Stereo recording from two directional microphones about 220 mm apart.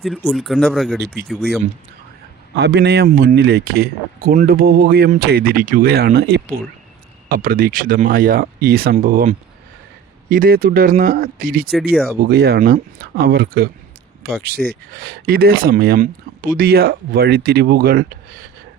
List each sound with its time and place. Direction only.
0.0 s speech: centre (ahead or behind)
2.6 s speech: 50° right (ahead or behind)